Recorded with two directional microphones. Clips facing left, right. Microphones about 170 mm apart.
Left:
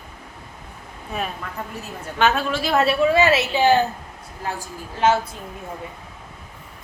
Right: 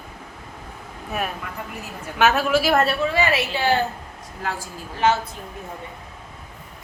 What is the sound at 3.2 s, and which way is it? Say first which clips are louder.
Speech: left 4 dB; 20° left (ahead or behind).